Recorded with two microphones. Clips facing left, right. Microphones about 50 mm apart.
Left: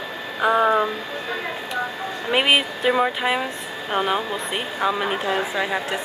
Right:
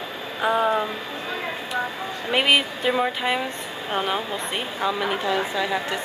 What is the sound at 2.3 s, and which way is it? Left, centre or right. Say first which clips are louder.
A woman's voice: left 1 dB; centre.